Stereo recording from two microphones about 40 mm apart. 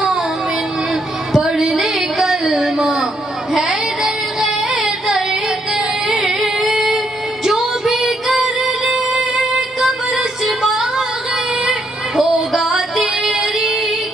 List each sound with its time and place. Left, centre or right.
1.3 s a sound: centre
4.0 s music: centre
12.2 s female singing: centre